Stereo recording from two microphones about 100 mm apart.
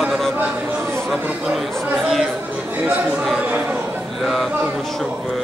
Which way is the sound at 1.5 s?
Centre (ahead or behind).